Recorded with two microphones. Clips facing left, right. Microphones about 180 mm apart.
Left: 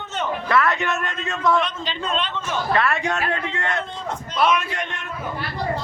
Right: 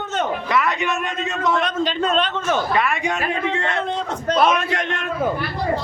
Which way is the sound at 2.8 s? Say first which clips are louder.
Right 1 dB; 15° right (ahead or behind).